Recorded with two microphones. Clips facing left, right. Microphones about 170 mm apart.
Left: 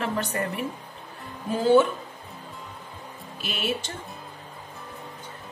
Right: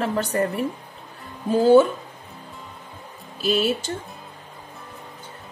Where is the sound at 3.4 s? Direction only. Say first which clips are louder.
Right 11 dB; 35° right (ahead or behind).